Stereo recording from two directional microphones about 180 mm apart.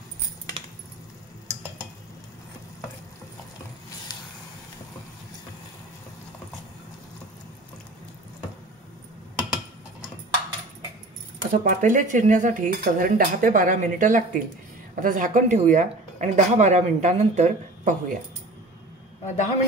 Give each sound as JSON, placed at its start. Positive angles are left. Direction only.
{"t": 11.5, "sound": "speech", "side_deg": -45}
{"t": 19.2, "sound": "a man's voice", "side_deg": 40}